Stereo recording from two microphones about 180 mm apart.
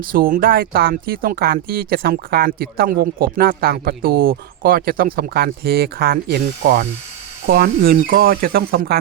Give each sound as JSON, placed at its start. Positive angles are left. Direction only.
{"t": 0.1, "sound": "speech", "side_deg": -55}